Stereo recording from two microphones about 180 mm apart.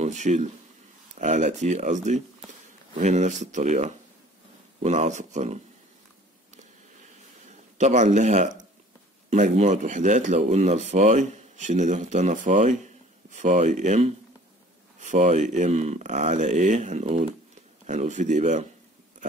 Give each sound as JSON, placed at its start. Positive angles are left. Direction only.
{"t": 0.0, "sound": "speech", "side_deg": -40}
{"t": 7.7, "sound": "speech", "side_deg": -40}